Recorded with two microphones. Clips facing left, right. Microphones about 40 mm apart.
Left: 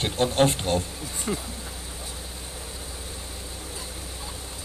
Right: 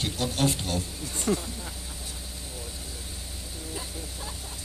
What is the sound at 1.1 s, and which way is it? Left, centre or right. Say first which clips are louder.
Speech: right 3 dB; centre.